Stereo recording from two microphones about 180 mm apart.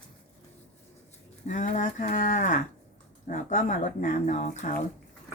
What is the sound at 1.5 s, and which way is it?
Speech, 45° left (ahead or behind).